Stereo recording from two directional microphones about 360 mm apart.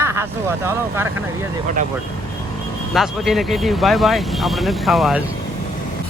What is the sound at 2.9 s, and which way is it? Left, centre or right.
Speech, centre.